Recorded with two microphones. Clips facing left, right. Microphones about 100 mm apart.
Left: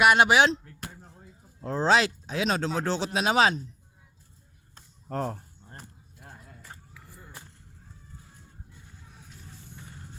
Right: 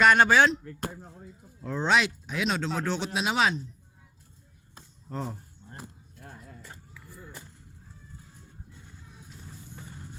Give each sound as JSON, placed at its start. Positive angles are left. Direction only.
{"t": 0.0, "sound": "speech", "side_deg": 10}
{"t": 1.6, "sound": "speech", "side_deg": 35}
{"t": 5.0, "sound": "speech", "side_deg": 55}